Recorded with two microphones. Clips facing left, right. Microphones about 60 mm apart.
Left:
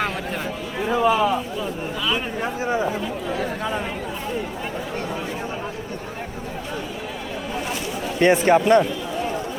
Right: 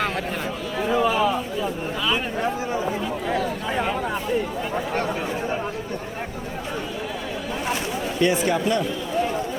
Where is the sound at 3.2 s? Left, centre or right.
Right.